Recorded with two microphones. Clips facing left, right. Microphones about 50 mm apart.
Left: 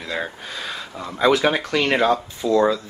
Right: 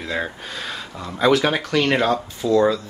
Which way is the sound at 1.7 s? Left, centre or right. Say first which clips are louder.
Right 1 dB; centre.